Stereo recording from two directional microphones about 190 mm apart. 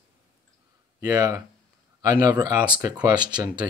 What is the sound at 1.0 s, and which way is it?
Speech, 20° right (ahead or behind).